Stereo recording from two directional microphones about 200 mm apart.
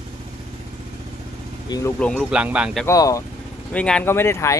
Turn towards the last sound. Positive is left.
turn(degrees=15)  # may be behind; listen again after turning